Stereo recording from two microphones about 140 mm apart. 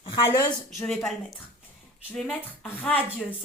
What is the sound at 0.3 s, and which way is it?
Speech, 15° left (ahead or behind).